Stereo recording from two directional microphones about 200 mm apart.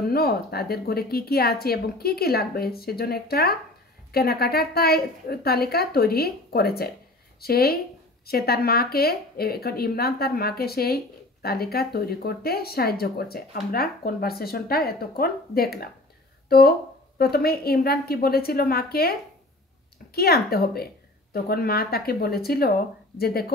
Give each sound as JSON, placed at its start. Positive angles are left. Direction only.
{"t": 0.1, "sound": "speech", "side_deg": 50}